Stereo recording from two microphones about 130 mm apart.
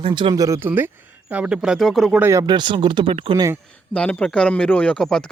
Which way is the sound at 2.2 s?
25° right (ahead or behind).